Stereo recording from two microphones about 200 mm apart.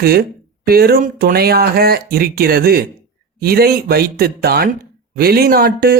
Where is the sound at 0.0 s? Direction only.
50° right (ahead or behind).